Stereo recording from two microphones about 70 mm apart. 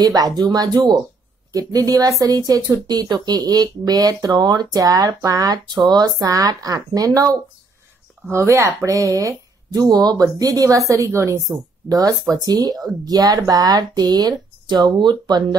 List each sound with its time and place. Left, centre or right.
0.0 s speech: right
1.5 s speech: right
4.8 s speech: right
8.3 s speech: right
11.9 s speech: right